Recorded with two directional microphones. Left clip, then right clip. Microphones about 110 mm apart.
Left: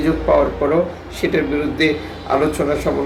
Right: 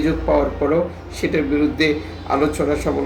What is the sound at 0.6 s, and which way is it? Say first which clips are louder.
A man's voice: left 2 dB; 10° left (ahead or behind).